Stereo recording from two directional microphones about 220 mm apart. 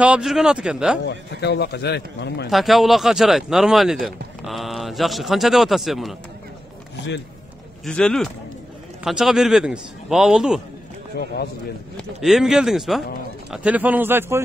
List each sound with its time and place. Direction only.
0.0 s speech: 5° right (ahead or behind)
1.0 s a man's voice: 50° left (ahead or behind)
2.5 s speech: centre (ahead or behind)
7.8 s speech: 5° left (ahead or behind)
11.1 s a man's voice: 45° left (ahead or behind)
12.0 s a man's voice: centre (ahead or behind)